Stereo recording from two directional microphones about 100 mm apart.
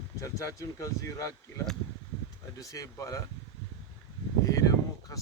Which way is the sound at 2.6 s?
35° left (ahead or behind).